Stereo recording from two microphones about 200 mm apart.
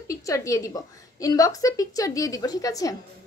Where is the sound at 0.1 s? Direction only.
15° left (ahead or behind).